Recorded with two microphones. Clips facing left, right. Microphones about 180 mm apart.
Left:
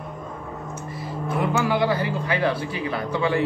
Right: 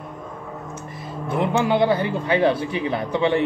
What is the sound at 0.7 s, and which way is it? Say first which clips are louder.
Speech: left 1 dB; 20° right (ahead or behind).